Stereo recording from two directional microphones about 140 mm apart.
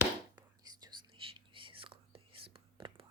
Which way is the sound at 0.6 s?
30° right (ahead or behind).